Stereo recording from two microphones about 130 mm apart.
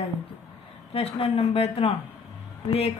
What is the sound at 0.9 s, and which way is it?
Speech, 45° left (ahead or behind).